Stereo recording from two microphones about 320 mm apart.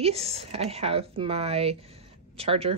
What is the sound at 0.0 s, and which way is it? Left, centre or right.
Speech, centre.